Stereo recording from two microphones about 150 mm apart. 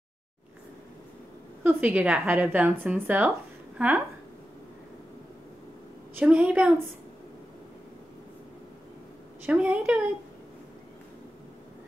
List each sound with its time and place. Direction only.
1.6 s a woman's voice: 10° right (ahead or behind)
6.1 s a woman's voice: 10° right (ahead or behind)
9.5 s a woman's voice: 10° right (ahead or behind)